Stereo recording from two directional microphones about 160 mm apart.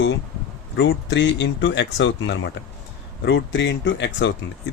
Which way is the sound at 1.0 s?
90° left.